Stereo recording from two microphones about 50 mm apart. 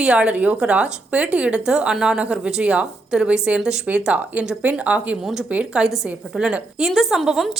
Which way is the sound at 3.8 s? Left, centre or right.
Right.